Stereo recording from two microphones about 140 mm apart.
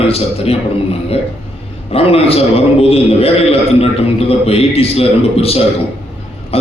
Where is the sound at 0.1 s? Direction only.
45° left (ahead or behind).